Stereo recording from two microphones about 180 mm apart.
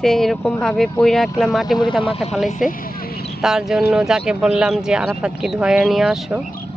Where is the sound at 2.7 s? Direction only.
55° left (ahead or behind).